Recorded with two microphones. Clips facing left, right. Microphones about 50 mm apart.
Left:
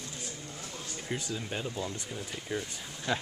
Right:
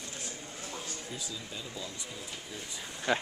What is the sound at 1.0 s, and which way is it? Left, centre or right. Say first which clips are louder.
Speech: left 6 dB; left.